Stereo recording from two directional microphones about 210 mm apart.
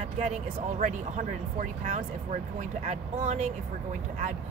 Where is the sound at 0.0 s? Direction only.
30° right (ahead or behind).